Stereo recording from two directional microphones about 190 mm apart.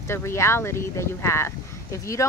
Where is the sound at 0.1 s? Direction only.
15° left (ahead or behind).